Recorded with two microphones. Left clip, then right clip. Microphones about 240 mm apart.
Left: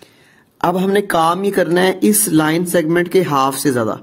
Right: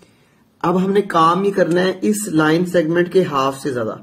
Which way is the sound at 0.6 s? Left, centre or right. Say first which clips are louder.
Left 2 dB; left.